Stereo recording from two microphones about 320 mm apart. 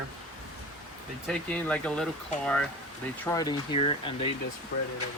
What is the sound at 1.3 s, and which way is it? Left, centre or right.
Speech, centre.